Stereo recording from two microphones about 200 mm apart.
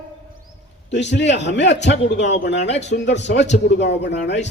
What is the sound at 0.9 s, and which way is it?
A man's voice, 60° left (ahead or behind).